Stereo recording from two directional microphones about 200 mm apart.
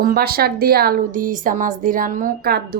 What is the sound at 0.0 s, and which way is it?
A woman's voice, 50° right (ahead or behind).